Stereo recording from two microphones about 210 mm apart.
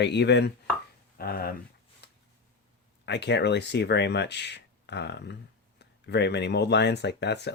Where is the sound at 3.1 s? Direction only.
55° left (ahead or behind).